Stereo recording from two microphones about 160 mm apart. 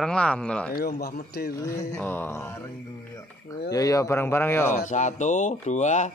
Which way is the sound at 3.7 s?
20° left (ahead or behind).